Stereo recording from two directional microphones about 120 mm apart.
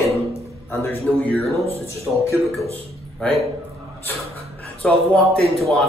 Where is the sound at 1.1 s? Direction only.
5° right (ahead or behind).